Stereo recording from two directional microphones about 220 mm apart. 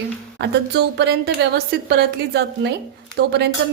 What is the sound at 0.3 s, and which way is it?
Speech, 50° right (ahead or behind).